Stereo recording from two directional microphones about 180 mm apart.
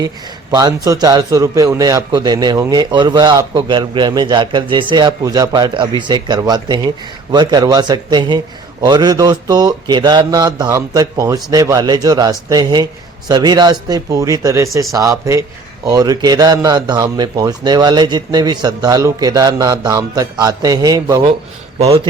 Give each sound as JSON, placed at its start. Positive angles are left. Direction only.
{"t": 0.5, "sound": "a man's voice", "side_deg": -20}
{"t": 21.8, "sound": "a man's voice", "side_deg": -35}